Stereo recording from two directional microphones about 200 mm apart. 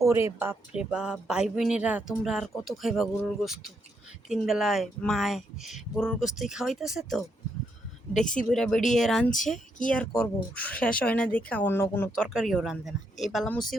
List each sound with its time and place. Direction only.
0.0 s speech: 15° right (ahead or behind)
8.2 s speech: 40° left (ahead or behind)
8.4 s speech: centre (ahead or behind)
12.1 s speech: centre (ahead or behind)